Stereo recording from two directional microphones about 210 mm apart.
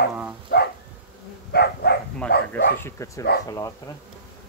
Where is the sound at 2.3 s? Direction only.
50° left (ahead or behind).